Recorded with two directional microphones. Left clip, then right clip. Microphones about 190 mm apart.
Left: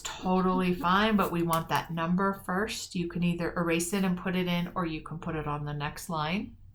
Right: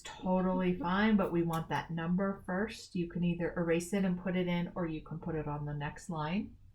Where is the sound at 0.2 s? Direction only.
25° left (ahead or behind).